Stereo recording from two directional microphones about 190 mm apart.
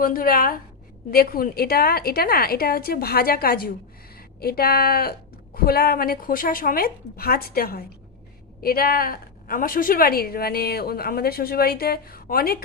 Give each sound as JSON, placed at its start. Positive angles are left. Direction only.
{"t": 0.0, "sound": "a woman's voice", "side_deg": 50}